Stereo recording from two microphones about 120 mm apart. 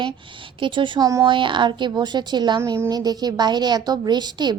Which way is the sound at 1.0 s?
30° right (ahead or behind).